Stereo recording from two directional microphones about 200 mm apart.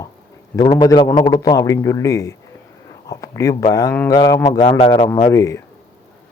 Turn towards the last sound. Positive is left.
turn(degrees=15)  # may be behind; listen again after turning